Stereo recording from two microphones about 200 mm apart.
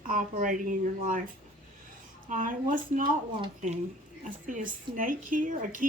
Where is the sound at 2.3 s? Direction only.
40° right (ahead or behind).